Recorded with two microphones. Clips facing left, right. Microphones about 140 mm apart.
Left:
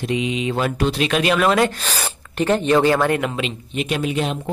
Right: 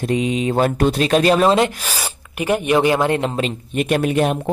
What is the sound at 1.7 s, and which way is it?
Speech, 10° right (ahead or behind).